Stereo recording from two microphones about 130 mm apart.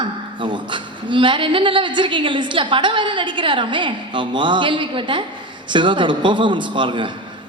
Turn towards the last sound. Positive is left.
turn(degrees=-40)  # may be behind; listen again after turning